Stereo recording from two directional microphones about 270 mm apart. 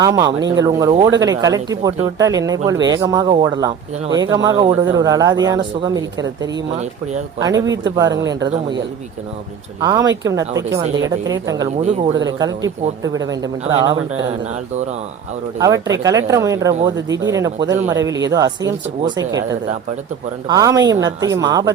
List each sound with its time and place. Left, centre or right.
0.0 s speech: centre
9.8 s speech: centre
15.5 s speech: centre